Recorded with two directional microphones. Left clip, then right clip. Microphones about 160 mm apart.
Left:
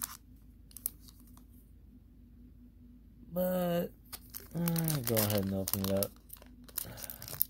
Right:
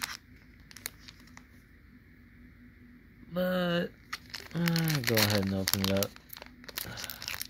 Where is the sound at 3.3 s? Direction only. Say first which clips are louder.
Right 2 dB; centre (ahead or behind).